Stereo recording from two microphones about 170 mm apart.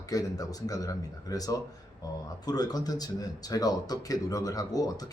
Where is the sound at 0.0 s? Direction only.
20° left (ahead or behind).